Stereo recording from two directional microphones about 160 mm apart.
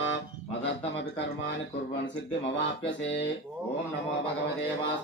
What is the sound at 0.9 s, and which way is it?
Speech, 90° left.